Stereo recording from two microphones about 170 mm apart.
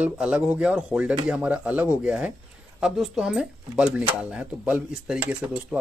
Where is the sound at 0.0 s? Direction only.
5° right (ahead or behind).